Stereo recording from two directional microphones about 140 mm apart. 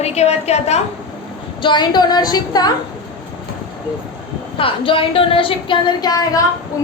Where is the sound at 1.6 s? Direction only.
35° left (ahead or behind).